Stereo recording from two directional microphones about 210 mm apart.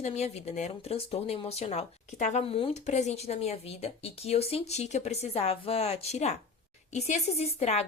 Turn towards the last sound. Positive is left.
turn(degrees=30)  # may be behind; listen again after turning